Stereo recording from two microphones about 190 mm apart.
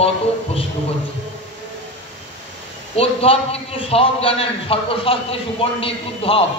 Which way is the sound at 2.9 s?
30° left (ahead or behind).